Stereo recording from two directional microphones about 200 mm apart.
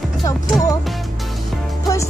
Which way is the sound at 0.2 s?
15° left (ahead or behind).